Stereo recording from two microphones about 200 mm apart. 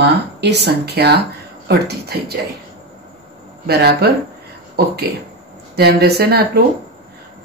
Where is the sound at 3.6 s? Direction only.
55° right (ahead or behind).